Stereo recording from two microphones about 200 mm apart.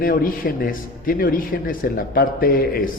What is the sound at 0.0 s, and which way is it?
A man's voice, 45° left (ahead or behind).